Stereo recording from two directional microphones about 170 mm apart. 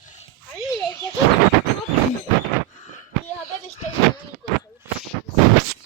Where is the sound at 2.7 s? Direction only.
45° left (ahead or behind).